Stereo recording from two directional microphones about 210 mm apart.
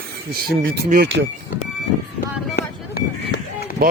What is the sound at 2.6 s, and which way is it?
Run, 50° left (ahead or behind).